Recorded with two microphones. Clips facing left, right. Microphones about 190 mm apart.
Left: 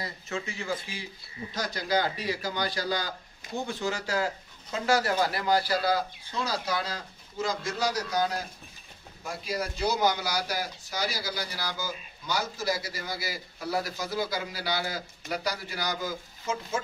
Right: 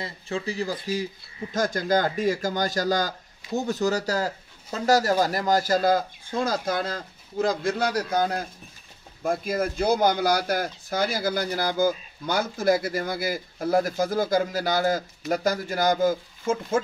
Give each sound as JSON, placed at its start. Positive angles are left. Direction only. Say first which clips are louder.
{"t": 0.0, "sound": "speech", "louder": "right 5 dB", "side_deg": -35}